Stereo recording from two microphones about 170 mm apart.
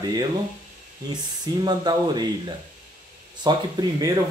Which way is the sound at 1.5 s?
25° right (ahead or behind).